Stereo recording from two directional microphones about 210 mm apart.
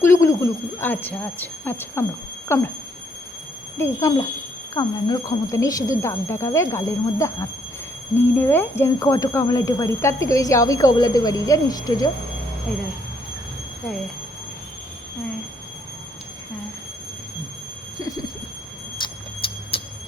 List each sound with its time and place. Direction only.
0.0 s speech: 15° left (ahead or behind)
3.8 s speech: 15° left (ahead or behind)
18.0 s a sound: 20° left (ahead or behind)
19.0 s vehicle: 20° left (ahead or behind)